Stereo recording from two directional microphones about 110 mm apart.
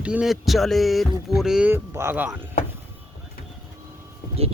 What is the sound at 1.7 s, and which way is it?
Speech, 20° right (ahead or behind).